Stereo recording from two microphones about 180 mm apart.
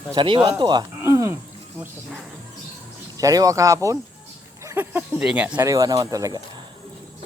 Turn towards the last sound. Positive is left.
turn(degrees=-20)  # may be behind; listen again after turning